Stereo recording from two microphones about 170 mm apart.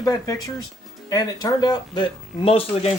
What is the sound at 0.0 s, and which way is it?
Speech, 20° left (ahead or behind).